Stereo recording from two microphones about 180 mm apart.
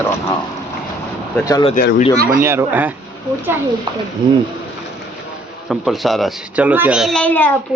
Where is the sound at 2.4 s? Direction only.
15° right (ahead or behind).